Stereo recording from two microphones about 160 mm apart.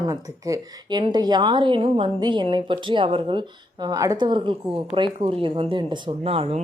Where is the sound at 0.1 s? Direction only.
20° right (ahead or behind).